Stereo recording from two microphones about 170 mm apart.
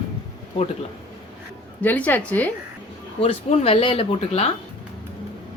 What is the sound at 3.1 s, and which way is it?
Speech, 35° left (ahead or behind).